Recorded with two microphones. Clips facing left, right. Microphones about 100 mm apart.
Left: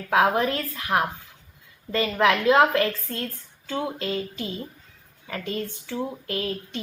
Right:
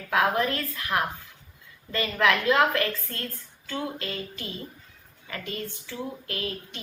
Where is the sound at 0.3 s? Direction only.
25° left (ahead or behind).